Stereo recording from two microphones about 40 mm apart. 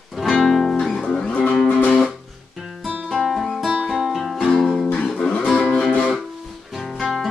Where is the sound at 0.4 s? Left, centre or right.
Centre.